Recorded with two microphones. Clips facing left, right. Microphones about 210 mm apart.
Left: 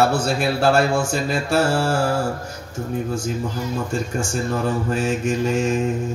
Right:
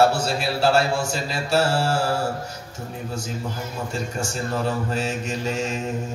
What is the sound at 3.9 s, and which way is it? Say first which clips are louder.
A man's voice: left 4 dB; 50° left (ahead or behind).